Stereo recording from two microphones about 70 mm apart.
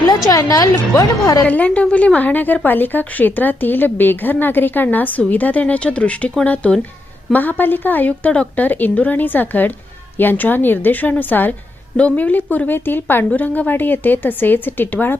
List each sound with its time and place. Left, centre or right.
0.3 s a woman's voice: left
1.5 s a woman's voice: left